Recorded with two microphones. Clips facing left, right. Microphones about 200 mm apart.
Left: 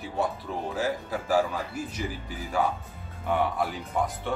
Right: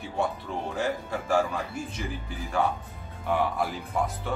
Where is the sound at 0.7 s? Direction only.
5° left (ahead or behind).